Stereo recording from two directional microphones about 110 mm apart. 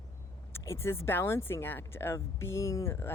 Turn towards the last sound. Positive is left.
turn(degrees=25)  # may be behind; listen again after turning